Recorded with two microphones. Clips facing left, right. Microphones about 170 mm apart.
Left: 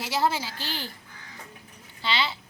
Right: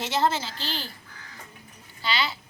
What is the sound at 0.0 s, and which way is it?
Speech, 5° left (ahead or behind).